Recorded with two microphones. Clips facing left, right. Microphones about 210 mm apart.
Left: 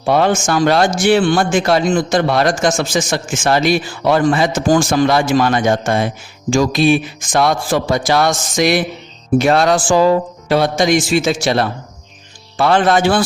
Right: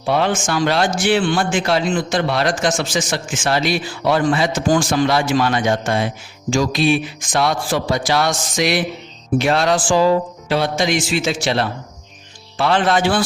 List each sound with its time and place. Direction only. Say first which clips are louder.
0.0 s a man's voice: left 4 dB; 45° left (ahead or behind)